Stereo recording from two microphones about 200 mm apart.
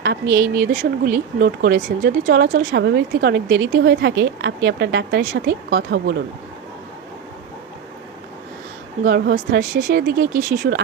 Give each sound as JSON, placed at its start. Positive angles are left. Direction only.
{"t": 0.3, "sound": "speech", "side_deg": -50}
{"t": 9.0, "sound": "speech", "side_deg": -55}